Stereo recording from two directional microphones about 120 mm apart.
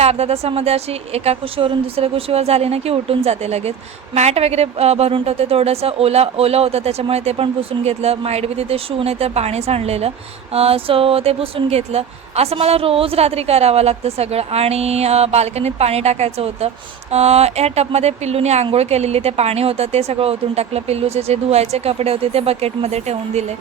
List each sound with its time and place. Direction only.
0.0 s speech: 60° right (ahead or behind)